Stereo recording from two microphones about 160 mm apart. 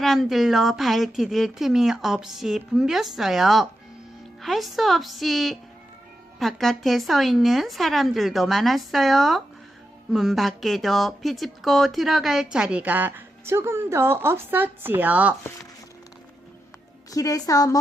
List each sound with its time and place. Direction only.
0.0 s a woman's voice: centre (ahead or behind)
17.1 s a woman's voice: 20° left (ahead or behind)